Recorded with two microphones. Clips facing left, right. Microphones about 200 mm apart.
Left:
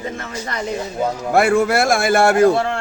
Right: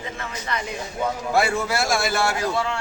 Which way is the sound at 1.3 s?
55° left (ahead or behind).